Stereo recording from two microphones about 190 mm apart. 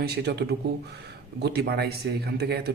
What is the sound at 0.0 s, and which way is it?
Speech, 60° right (ahead or behind).